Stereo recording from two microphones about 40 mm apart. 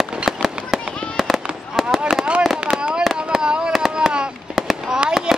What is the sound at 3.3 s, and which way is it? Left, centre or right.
Fireworks, centre.